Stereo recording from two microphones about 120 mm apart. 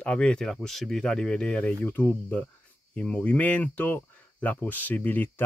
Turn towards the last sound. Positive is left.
turn(degrees=15)  # may be behind; listen again after turning